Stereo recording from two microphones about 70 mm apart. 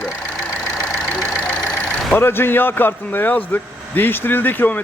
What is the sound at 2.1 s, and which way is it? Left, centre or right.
Speech, left.